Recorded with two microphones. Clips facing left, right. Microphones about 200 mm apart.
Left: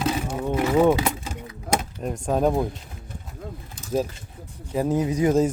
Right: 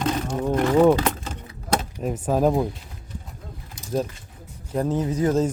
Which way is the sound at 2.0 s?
5° right (ahead or behind).